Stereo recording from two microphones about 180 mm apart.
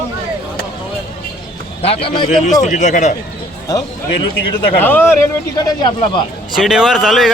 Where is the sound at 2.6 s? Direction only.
40° left (ahead or behind).